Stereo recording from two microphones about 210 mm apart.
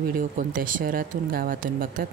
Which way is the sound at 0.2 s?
40° right (ahead or behind).